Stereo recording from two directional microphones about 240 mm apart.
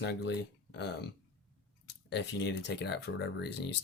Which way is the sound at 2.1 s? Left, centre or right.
Left.